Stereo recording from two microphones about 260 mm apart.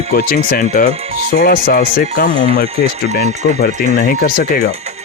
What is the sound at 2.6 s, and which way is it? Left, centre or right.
Speech, right.